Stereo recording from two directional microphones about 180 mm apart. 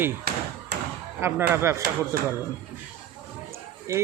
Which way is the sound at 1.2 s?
10° right (ahead or behind).